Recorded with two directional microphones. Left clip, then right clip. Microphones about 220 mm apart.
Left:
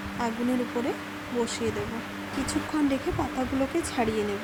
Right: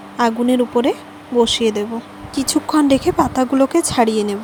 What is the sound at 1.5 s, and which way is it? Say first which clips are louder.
Speech: right 13 dB; 40° right (ahead or behind).